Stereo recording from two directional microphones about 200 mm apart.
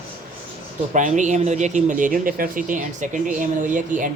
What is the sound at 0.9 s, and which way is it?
Speech, 40° right (ahead or behind).